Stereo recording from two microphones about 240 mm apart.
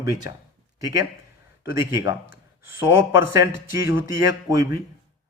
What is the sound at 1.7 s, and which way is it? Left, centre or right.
A man's voice, centre.